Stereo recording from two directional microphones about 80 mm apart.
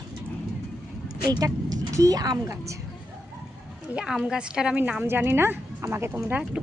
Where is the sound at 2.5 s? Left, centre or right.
Right.